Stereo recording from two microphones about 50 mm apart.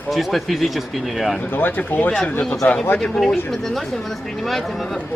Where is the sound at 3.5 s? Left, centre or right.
Centre.